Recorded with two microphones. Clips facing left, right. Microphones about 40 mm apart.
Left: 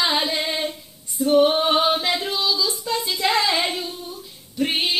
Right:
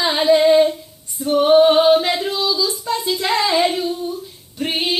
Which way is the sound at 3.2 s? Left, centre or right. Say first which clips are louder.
Even; right.